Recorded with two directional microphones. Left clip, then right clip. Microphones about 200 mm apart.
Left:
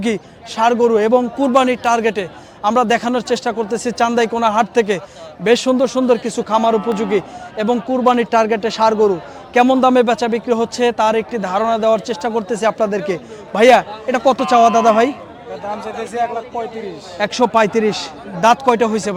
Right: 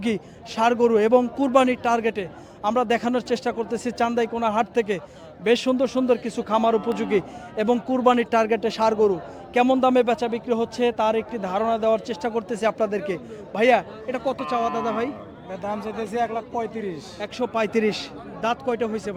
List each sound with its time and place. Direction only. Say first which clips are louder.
0.0 s a man's voice: left 7 dB; 5° right (ahead or behind)
13.5 s speech: left 9 dB; 10° left (ahead or behind); by 15.1 s 35° left (ahead or behind)
15.8 s a man's voice: left 5 dB; 45° right (ahead or behind)
16.2 s a man's voice: left 6 dB; 65° right (ahead or behind)
17.2 s speech: left 12 dB; 25° left (ahead or behind)
17.7 s a man's voice: left 6 dB; 5° right (ahead or behind)
18.3 s speech: left 12 dB; 30° left (ahead or behind)